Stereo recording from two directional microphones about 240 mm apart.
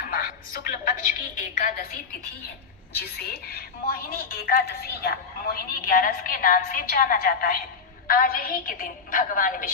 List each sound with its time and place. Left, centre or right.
0.1 s a woman's voice: left
3.0 s a woman's voice: left